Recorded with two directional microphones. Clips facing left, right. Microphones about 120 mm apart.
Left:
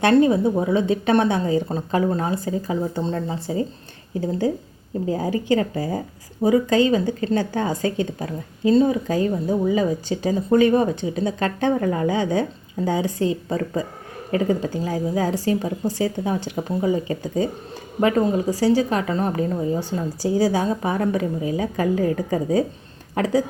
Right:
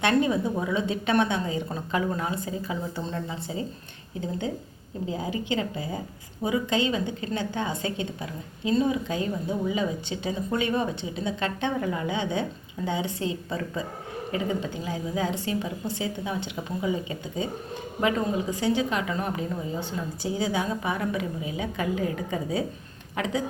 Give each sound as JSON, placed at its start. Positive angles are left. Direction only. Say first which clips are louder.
{"t": 0.0, "sound": "a woman's voice", "louder": "left 7 dB", "side_deg": 35}
{"t": 5.0, "sound": "a woman's voice", "louder": "left 8 dB", "side_deg": 45}
{"t": 18.5, "sound": "a woman's voice", "louder": "left 6 dB", "side_deg": 35}